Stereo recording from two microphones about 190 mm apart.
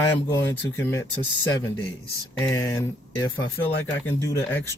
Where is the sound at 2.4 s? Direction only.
15° left (ahead or behind).